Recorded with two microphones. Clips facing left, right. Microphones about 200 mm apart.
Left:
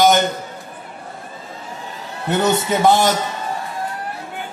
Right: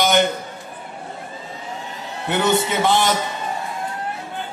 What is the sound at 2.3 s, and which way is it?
Speech, 45° left (ahead or behind).